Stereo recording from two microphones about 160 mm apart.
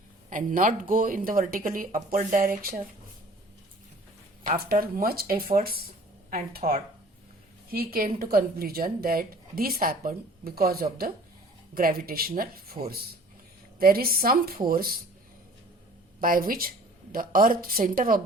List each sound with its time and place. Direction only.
0.3 s speech: 55° right (ahead or behind)
4.4 s a woman's voice: 70° right (ahead or behind)
16.2 s speech: 65° right (ahead or behind)